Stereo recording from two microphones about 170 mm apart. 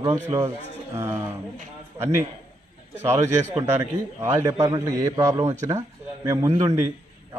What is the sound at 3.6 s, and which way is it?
A man's voice, 15° right (ahead or behind).